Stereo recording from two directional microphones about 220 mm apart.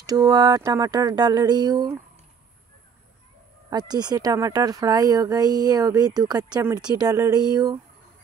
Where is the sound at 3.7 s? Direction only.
20° right (ahead or behind).